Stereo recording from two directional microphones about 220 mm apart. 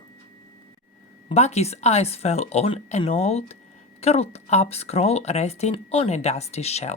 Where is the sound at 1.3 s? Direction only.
30° left (ahead or behind).